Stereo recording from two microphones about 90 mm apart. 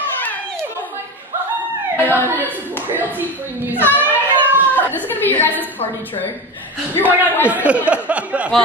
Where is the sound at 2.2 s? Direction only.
20° right (ahead or behind).